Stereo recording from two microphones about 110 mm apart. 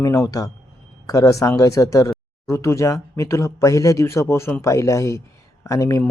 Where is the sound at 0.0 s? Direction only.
30° left (ahead or behind).